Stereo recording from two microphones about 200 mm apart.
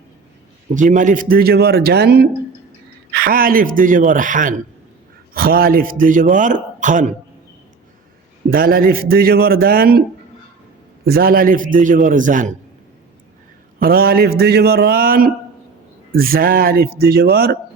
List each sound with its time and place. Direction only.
0.7 s a man's voice: 40° right (ahead or behind)
8.4 s a man's voice: 45° right (ahead or behind)
11.0 s a man's voice: 50° right (ahead or behind)
13.7 s a man's voice: 50° right (ahead or behind)